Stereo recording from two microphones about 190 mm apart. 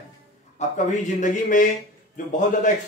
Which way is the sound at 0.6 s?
40° left (ahead or behind).